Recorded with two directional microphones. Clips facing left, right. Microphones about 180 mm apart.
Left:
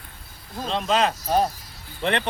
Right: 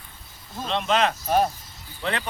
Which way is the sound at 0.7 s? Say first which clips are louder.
Even; 35° left (ahead or behind).